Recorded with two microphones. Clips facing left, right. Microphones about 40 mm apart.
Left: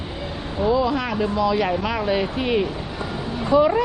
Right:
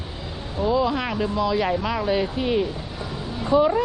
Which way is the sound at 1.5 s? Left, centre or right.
Left.